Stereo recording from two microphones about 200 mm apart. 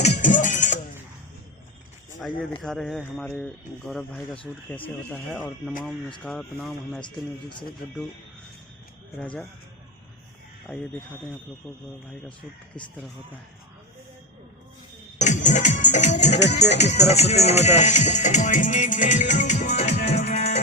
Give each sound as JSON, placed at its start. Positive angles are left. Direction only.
{"t": 0.2, "sound": "music", "side_deg": 40}
{"t": 2.6, "sound": "speech", "side_deg": 0}
{"t": 9.1, "sound": "speech", "side_deg": 5}
{"t": 15.2, "sound": "music", "side_deg": 35}
{"t": 16.6, "sound": "speech", "side_deg": 35}